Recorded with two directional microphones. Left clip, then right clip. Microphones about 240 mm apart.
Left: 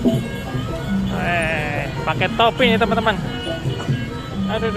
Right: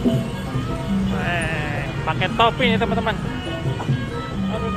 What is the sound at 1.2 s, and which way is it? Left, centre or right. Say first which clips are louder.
Speech: left 5 dB; centre.